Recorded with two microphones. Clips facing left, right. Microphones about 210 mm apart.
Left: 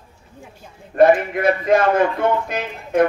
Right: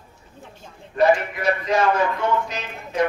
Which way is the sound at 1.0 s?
55° left (ahead or behind).